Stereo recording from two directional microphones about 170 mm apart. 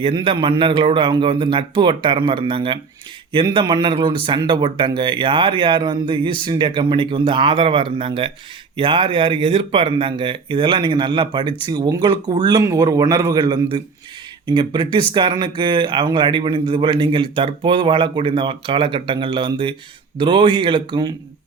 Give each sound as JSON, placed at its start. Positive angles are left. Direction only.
{"t": 0.0, "sound": "speech", "side_deg": -30}